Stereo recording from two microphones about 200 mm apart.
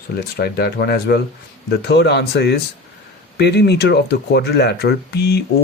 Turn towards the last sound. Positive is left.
turn(degrees=55)  # may be behind; listen again after turning